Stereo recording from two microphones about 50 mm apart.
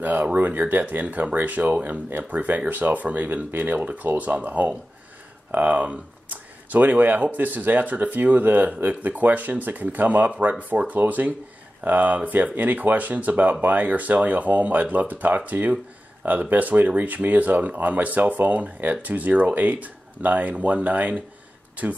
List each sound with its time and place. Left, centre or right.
0.0 s speech: right